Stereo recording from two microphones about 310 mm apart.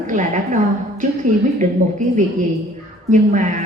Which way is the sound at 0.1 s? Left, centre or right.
Right.